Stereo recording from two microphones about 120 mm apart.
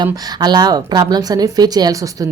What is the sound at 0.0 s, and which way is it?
A woman's voice, 35° right (ahead or behind).